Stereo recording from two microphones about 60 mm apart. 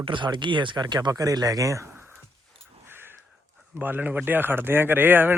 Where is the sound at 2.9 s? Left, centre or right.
Right.